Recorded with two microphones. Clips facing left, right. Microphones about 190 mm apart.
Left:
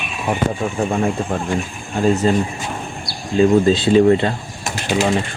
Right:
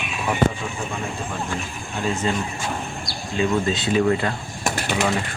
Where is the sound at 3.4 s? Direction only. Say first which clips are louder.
Left 9 dB; 35° left (ahead or behind).